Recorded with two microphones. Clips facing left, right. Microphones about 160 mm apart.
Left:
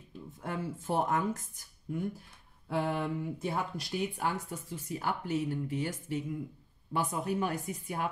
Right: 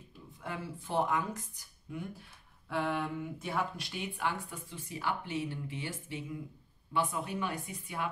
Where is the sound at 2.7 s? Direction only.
40° left (ahead or behind).